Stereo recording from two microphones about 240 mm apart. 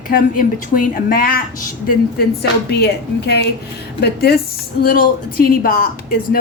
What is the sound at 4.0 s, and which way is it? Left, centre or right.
A woman's voice, left.